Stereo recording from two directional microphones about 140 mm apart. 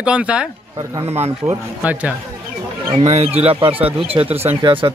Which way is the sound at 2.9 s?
45° right (ahead or behind).